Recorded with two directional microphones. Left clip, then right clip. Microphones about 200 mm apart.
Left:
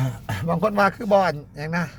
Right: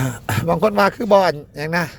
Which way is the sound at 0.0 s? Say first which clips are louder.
Right 7 dB; 35° right (ahead or behind).